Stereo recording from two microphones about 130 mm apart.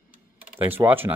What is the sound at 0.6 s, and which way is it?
Speech, 15° right (ahead or behind).